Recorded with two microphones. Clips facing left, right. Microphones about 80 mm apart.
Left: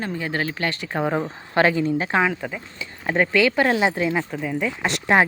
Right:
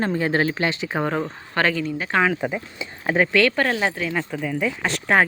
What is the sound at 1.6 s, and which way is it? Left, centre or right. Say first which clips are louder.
Speech: left 3 dB; centre.